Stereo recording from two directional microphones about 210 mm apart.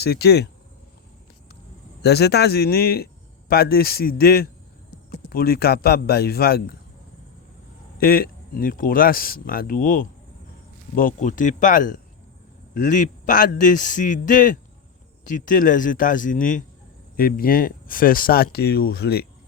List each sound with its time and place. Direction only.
0.0 s speech: 50° left (ahead or behind)
2.0 s speech: 50° left (ahead or behind)
7.9 s a man's voice: 45° left (ahead or behind)